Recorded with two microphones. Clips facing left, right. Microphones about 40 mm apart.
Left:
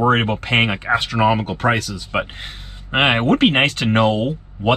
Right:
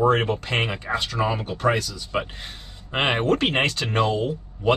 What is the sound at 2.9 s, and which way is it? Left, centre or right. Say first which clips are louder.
Speech: left 5 dB; left.